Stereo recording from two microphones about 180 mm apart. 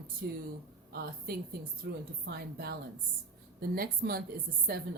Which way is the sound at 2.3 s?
65° right (ahead or behind).